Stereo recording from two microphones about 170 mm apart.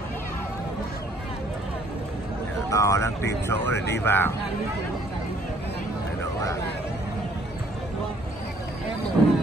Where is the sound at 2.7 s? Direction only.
20° left (ahead or behind).